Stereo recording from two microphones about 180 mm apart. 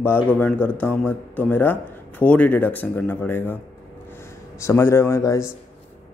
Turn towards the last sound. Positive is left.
turn(degrees=15)  # may be behind; listen again after turning